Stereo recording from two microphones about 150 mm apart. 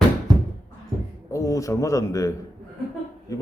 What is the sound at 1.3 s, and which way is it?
Speech, 20° left (ahead or behind).